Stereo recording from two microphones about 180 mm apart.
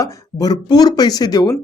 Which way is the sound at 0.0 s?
20° left (ahead or behind).